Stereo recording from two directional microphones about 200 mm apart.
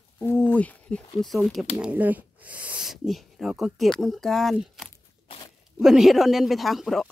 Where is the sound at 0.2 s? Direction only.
10° left (ahead or behind).